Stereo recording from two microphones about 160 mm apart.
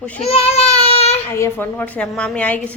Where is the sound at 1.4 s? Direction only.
10° left (ahead or behind).